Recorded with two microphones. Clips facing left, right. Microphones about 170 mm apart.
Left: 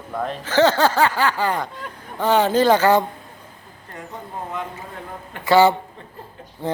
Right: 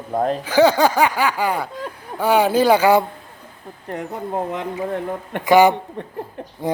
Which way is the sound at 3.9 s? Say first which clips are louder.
Right 9 dB; 75° right (ahead or behind).